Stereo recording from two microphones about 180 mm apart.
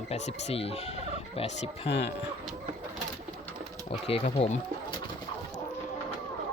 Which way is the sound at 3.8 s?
35° left (ahead or behind).